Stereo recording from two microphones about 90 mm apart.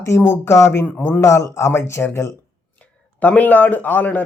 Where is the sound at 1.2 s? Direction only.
35° left (ahead or behind).